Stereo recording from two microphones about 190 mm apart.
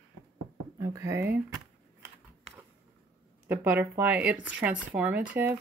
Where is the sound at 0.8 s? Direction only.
15° right (ahead or behind).